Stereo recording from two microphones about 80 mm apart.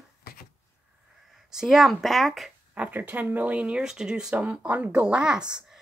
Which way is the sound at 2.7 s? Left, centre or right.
Centre.